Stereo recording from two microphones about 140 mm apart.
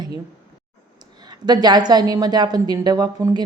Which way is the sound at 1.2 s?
30° right (ahead or behind).